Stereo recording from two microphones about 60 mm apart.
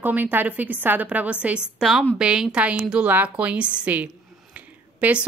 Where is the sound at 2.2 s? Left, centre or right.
Centre.